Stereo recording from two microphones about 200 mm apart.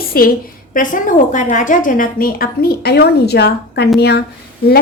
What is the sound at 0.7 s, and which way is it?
A woman's voice, 40° left (ahead or behind).